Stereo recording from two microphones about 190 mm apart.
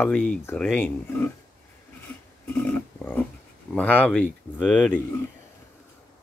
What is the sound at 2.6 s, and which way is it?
Dog, 5° left (ahead or behind).